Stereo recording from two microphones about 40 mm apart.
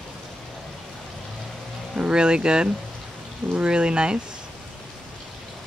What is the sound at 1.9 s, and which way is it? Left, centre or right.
Speech, right.